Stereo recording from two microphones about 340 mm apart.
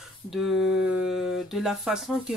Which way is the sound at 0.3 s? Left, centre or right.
Centre.